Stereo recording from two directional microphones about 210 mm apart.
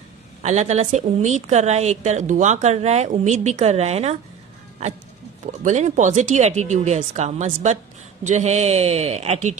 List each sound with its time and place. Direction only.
0.4 s speech: 35° right (ahead or behind)